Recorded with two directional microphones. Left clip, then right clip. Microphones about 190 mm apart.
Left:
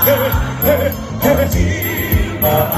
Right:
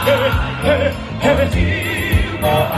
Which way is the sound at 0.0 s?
50° left (ahead or behind).